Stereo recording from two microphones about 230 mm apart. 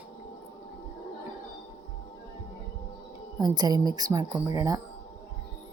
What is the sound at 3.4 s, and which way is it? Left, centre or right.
Speech, centre.